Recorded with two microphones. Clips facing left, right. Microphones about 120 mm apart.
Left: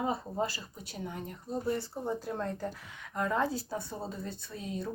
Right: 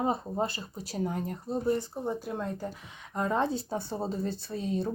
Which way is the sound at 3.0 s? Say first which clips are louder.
Right 2 dB; 25° right (ahead or behind).